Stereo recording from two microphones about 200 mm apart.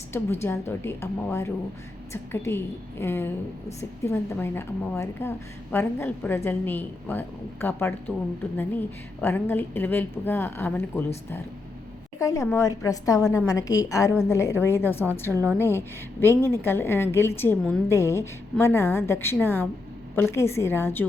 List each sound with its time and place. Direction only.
0.4 s a woman's voice: 10° left (ahead or behind)
9.2 s a woman's voice: 10° left (ahead or behind)
12.2 s a woman's voice: 15° left (ahead or behind)
15.3 s a woman's voice: 15° right (ahead or behind)
15.5 s a woman's voice: 10° left (ahead or behind)